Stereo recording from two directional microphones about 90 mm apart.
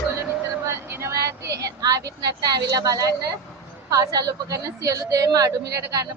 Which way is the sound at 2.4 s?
45° right (ahead or behind).